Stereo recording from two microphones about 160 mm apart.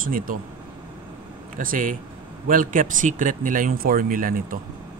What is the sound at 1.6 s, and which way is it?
Speech, 60° right (ahead or behind).